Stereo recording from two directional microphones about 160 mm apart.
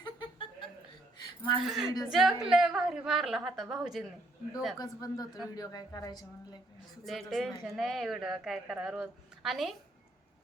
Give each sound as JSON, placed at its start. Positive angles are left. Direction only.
{"t": 0.0, "sound": "chuckle", "side_deg": 30}
{"t": 1.2, "sound": "a sound", "side_deg": 25}
{"t": 1.6, "sound": "speech", "side_deg": 0}
{"t": 4.8, "sound": "speech", "side_deg": 20}
{"t": 7.0, "sound": "speech", "side_deg": 0}